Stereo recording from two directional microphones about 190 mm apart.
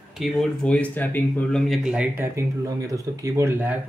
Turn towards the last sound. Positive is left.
turn(degrees=-10)  # may be behind; listen again after turning